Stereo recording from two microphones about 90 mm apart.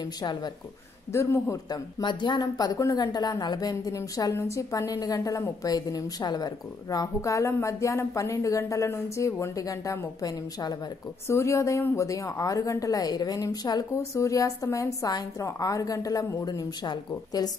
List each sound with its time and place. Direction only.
0.0 s speech: 50° left (ahead or behind)
1.1 s speech: 35° left (ahead or behind)
1.7 s speech: 55° left (ahead or behind)
11.2 s speech: 30° left (ahead or behind)
16.4 s speech: 50° left (ahead or behind)